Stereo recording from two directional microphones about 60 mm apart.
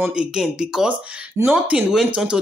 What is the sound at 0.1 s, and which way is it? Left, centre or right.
Speech, centre.